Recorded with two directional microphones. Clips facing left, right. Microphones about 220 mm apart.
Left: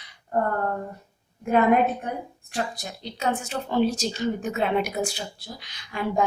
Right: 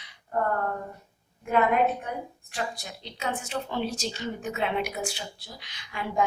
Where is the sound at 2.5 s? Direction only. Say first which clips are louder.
Left 5 dB; 40° left (ahead or behind).